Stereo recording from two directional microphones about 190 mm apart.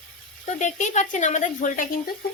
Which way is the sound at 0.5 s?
40° left (ahead or behind).